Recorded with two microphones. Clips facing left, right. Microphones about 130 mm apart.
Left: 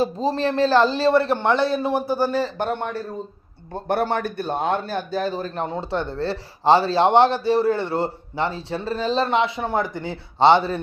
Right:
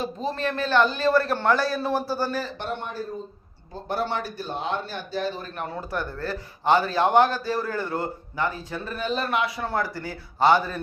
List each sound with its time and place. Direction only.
0.0 s a man's voice: 35° left (ahead or behind)
2.6 s speech: 60° left (ahead or behind); by 5.5 s 45° left (ahead or behind)
5.5 s a man's voice: 25° left (ahead or behind)